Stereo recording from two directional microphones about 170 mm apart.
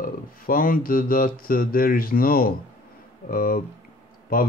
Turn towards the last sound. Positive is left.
turn(degrees=60)  # may be behind; listen again after turning